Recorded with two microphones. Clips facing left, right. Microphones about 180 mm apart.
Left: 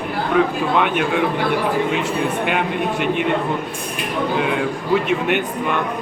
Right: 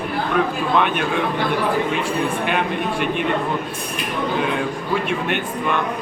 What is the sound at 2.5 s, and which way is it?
Speech, 15° left (ahead or behind).